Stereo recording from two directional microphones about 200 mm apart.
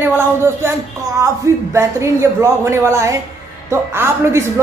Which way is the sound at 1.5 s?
15° right (ahead or behind).